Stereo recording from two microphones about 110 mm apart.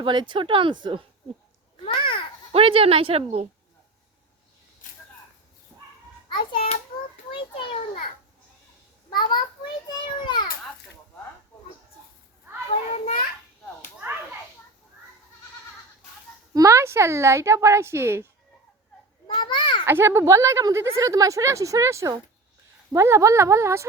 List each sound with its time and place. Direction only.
0.0 s speech: 45° right (ahead or behind)
1.8 s babbling: 55° left (ahead or behind)
2.5 s a woman's voice: 55° right (ahead or behind)
6.2 s a child's voice: 50° left (ahead or behind)
7.3 s children playing: 50° left (ahead or behind)
9.0 s a sound: 40° left (ahead or behind)
10.2 s children playing: 45° left (ahead or behind)
16.6 s speech: 30° right (ahead or behind)
19.3 s children playing: 45° left (ahead or behind)
19.8 s speech: 20° right (ahead or behind)